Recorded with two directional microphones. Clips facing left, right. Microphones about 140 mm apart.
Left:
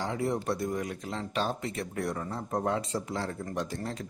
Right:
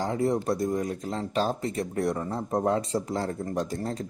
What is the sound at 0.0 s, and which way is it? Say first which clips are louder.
Speech: right 5 dB; 40° right (ahead or behind).